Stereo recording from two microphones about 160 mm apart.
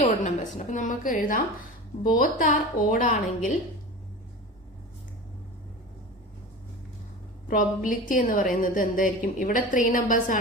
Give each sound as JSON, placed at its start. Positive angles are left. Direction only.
{"t": 0.0, "sound": "a woman's voice", "side_deg": 50}
{"t": 7.4, "sound": "a woman's voice", "side_deg": 55}